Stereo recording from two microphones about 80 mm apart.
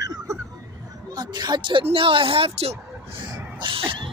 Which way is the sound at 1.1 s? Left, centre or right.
Right.